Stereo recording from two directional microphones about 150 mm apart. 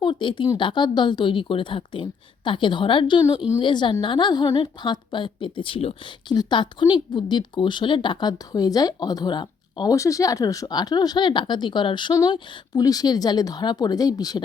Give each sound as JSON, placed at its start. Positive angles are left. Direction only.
{"t": 0.0, "sound": "a woman's voice", "side_deg": 35}